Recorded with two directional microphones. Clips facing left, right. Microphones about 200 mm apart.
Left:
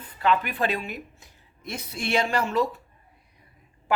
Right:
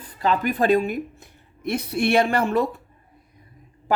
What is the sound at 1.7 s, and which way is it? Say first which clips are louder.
A woman's voice: right 8 dB; 65° right (ahead or behind).